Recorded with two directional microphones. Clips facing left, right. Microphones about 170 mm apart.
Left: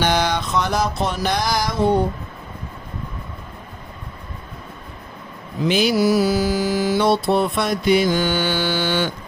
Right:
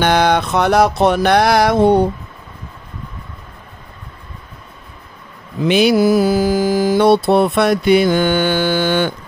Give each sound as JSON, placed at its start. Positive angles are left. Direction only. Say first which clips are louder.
{"t": 0.0, "sound": "mantra", "louder": "right 6 dB", "side_deg": -60}
{"t": 5.7, "sound": "mantra", "louder": "right 5 dB", "side_deg": -65}